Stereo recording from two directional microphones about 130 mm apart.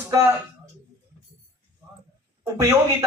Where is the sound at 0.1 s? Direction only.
20° right (ahead or behind).